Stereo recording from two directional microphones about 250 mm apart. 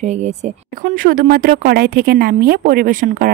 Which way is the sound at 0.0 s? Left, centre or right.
Right.